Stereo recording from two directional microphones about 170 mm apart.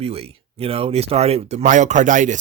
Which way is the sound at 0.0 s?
35° right (ahead or behind).